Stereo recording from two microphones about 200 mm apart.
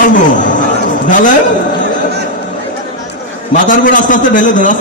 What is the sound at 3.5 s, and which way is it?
A man's voice, 40° left (ahead or behind).